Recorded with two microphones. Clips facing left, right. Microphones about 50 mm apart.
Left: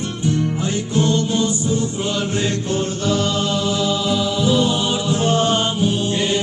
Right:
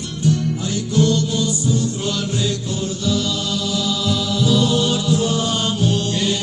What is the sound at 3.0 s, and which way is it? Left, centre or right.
Music, left.